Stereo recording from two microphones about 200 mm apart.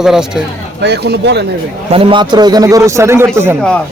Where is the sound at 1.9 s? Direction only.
25° right (ahead or behind).